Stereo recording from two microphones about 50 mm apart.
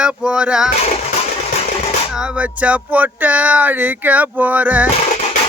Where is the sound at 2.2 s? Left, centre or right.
Right.